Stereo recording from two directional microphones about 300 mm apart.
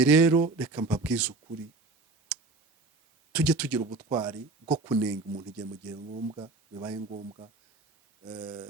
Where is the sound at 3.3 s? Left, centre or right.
Centre.